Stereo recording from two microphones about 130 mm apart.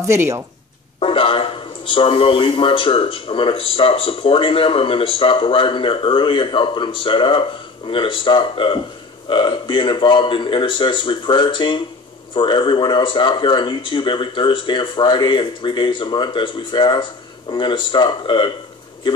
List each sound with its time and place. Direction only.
0.0 s speech: 20° right (ahead or behind)
0.9 s a man's voice: 45° left (ahead or behind)